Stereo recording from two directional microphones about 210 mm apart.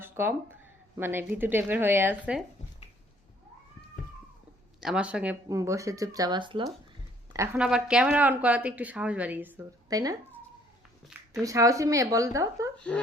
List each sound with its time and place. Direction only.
0.0 s a sound: 10° right (ahead or behind)
0.9 s a woman's voice: 10° right (ahead or behind)
4.8 s a woman's voice: 5° right (ahead or behind); by 6.7 s 25° right (ahead or behind)
7.3 s a woman's voice: 10° right (ahead or behind)
11.0 s speech: centre (ahead or behind)
11.4 s a woman's voice: 15° right (ahead or behind)